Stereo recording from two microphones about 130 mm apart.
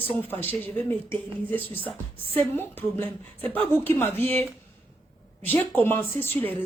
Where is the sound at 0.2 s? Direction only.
15° left (ahead or behind).